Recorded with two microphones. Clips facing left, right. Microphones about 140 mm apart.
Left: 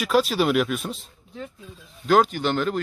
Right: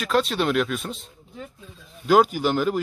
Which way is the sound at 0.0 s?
5° left (ahead or behind).